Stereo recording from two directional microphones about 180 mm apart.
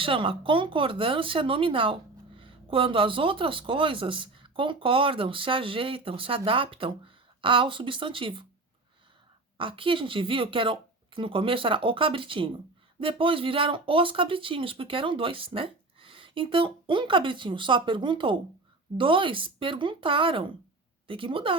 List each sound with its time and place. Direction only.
0.0 s speech: 30° right (ahead or behind)
9.6 s speech: 30° right (ahead or behind)